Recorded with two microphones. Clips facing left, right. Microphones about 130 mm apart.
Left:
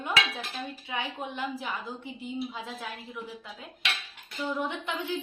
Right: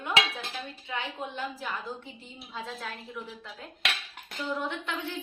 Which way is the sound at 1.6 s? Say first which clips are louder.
Even; 15° left (ahead or behind).